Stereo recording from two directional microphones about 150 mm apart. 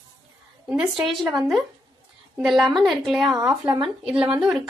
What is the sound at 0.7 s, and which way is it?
Speech, 5° right (ahead or behind).